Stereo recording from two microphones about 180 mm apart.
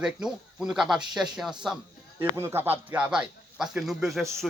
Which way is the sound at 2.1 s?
15° right (ahead or behind).